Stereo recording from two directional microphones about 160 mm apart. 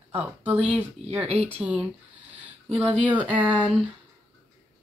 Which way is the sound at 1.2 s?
40° right (ahead or behind).